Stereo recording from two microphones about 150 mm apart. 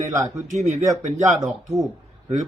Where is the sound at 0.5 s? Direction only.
50° right (ahead or behind).